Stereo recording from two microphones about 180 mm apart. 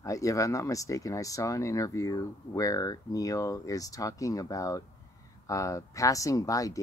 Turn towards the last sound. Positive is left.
turn(degrees=20)  # may be behind; listen again after turning